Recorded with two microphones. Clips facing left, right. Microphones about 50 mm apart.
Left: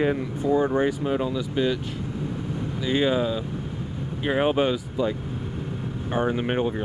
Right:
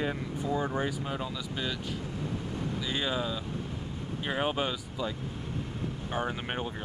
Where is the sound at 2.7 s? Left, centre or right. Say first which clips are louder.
Left 11 dB; left.